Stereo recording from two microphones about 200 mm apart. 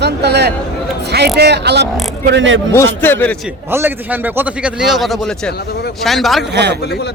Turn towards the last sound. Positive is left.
turn(degrees=-55)  # may be behind; listen again after turning